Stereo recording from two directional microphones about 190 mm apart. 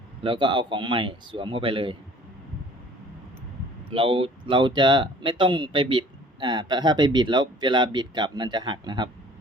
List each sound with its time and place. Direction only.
0.2 s speech: 25° right (ahead or behind)
3.8 s speech: 30° right (ahead or behind)